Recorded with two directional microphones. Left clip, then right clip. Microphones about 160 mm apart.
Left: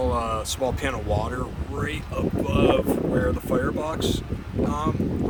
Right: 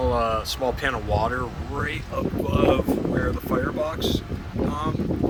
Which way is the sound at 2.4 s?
10° left (ahead or behind).